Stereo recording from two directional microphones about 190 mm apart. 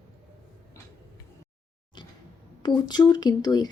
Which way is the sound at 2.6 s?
20° left (ahead or behind).